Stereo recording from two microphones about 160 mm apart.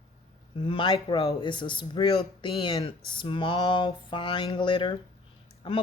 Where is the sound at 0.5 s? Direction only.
35° left (ahead or behind).